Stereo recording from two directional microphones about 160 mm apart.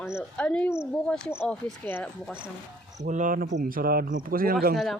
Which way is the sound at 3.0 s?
55° right (ahead or behind).